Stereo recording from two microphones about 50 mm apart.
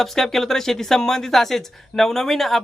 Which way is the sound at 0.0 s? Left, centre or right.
Centre.